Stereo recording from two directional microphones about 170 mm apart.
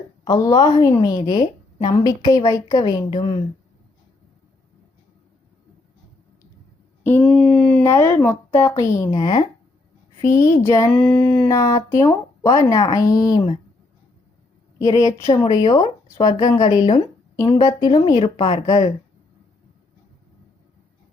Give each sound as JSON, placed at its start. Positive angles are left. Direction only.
{"t": 0.3, "sound": "a woman's voice", "side_deg": 20}
{"t": 7.0, "sound": "a sound", "side_deg": 10}
{"t": 7.9, "sound": "speech", "side_deg": 15}
{"t": 10.2, "sound": "a woman's voice", "side_deg": 50}
{"t": 10.6, "sound": "speech", "side_deg": 15}
{"t": 10.9, "sound": "a sound", "side_deg": 5}
{"t": 11.4, "sound": "a woman's voice", "side_deg": 20}
{"t": 14.8, "sound": "a woman's voice", "side_deg": 20}